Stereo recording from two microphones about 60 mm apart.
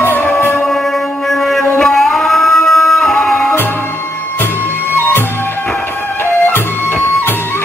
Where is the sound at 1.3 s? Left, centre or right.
Centre.